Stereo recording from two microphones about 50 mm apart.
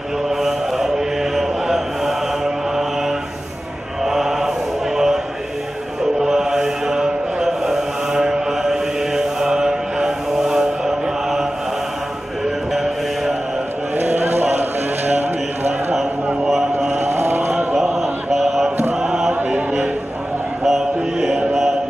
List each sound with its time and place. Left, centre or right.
0.3 s mantra: centre
4.0 s chant: centre
4.9 s a sound: centre
6.2 s mantra: centre
12.4 s mantra: centre
13.9 s a sound: right
16.4 s a sound: centre
16.9 s vehicle: right
17.7 s chant: centre
19.3 s chant: right
20.6 s music: centre